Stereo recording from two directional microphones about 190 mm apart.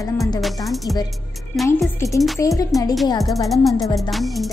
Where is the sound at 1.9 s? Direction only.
15° left (ahead or behind).